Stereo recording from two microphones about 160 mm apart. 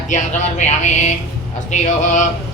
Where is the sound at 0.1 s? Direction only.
50° left (ahead or behind).